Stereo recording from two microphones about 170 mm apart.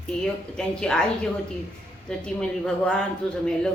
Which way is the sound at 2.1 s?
5° left (ahead or behind).